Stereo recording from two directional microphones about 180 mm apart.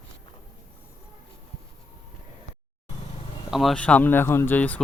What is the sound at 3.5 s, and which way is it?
Speech, centre (ahead or behind).